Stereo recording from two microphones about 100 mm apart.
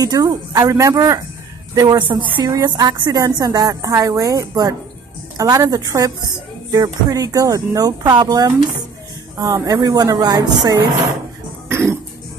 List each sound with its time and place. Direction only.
0.0 s a woman's voice: 40° right (ahead or behind)
2.0 s a woman's voice: 55° right (ahead or behind)
11.7 s cough: 25° right (ahead or behind)